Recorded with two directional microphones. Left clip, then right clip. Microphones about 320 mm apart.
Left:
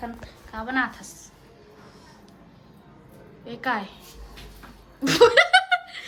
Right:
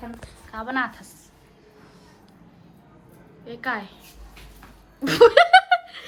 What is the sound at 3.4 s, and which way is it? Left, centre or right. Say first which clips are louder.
Speech: left 1 dB; centre.